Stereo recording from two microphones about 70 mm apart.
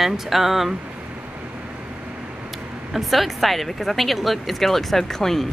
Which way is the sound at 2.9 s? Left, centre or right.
Centre.